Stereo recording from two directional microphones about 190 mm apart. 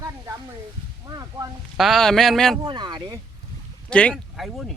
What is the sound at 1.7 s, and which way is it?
Speech, centre (ahead or behind).